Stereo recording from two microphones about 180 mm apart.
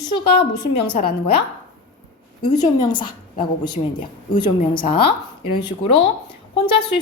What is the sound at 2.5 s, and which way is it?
A woman's voice, 25° left (ahead or behind).